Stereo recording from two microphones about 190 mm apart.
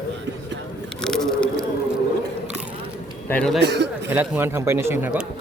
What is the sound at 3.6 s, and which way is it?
Speech, 65° right (ahead or behind).